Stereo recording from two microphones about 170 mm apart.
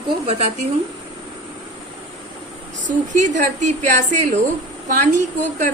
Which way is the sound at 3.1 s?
45° right (ahead or behind).